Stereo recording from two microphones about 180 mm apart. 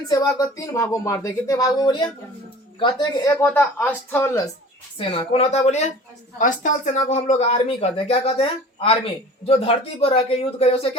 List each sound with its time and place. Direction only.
0.1 s speech: 20° left (ahead or behind)
3.3 s speech: 10° left (ahead or behind)
4.9 s speech: 30° left (ahead or behind)